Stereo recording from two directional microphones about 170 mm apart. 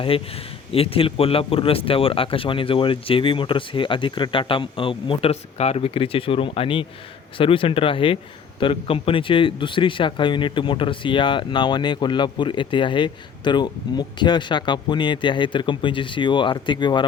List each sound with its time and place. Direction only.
0.7 s a man's voice: 35° left (ahead or behind)